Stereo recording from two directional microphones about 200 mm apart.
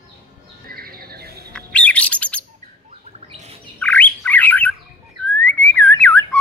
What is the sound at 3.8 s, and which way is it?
Bird, 10° left (ahead or behind).